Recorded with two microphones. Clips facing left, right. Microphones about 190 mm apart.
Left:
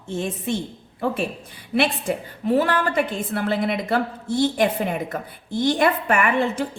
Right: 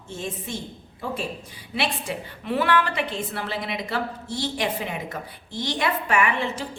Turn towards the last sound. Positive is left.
turn(degrees=50)  # may be behind; listen again after turning